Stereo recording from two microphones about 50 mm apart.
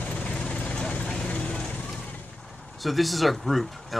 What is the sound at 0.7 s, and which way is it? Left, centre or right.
Vehicle, centre.